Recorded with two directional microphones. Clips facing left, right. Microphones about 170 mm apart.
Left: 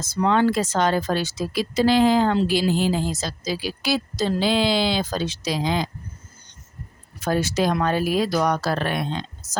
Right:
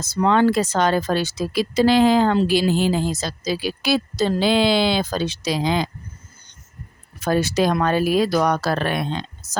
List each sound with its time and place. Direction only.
0.0 s speech: 65° right (ahead or behind)
7.3 s speech: 65° right (ahead or behind)